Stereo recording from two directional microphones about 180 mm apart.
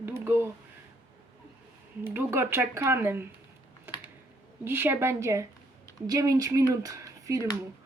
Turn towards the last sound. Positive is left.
turn(degrees=-15)  # may be behind; listen again after turning